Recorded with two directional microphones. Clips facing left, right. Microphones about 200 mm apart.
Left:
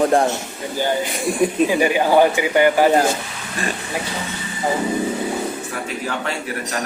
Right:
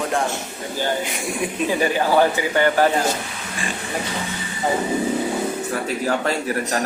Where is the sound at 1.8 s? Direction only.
15° left (ahead or behind).